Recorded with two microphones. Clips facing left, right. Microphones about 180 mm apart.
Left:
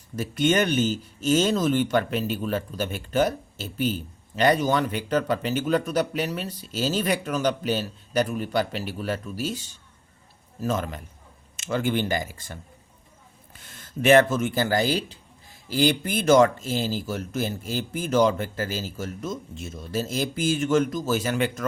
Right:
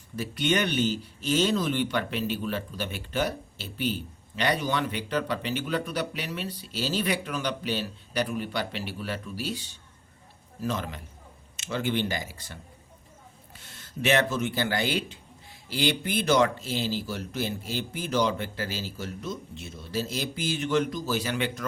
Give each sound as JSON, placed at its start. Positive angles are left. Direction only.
{"t": 0.2, "sound": "speech", "side_deg": 45}